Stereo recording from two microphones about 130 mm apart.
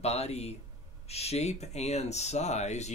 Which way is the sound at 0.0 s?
55° left (ahead or behind).